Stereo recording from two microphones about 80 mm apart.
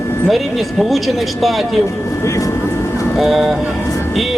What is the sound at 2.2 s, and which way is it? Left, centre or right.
Speech, left.